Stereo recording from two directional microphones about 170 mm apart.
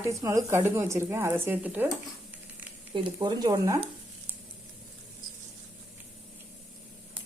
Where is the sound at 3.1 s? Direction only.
25° right (ahead or behind).